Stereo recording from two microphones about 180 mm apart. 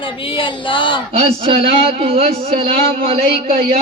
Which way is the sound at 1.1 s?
30° right (ahead or behind).